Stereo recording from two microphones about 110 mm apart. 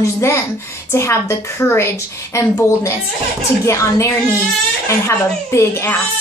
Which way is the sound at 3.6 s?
30° left (ahead or behind).